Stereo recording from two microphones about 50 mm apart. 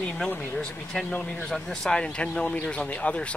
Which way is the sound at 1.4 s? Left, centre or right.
Centre.